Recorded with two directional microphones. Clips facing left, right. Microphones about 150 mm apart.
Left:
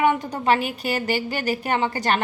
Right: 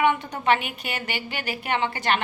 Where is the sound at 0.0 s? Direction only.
40° left (ahead or behind).